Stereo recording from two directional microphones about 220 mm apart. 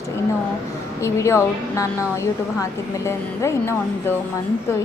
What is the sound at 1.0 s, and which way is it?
A woman's voice, 15° left (ahead or behind).